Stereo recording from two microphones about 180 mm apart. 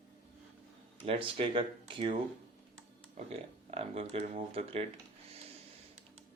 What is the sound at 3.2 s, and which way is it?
Speech, 35° right (ahead or behind).